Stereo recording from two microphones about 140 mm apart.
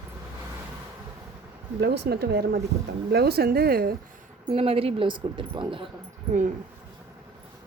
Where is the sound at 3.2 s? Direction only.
90° right.